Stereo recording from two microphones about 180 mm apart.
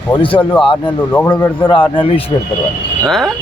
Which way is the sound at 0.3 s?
10° left (ahead or behind).